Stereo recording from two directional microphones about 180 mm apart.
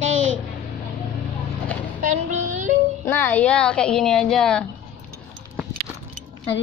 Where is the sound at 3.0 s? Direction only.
15° left (ahead or behind).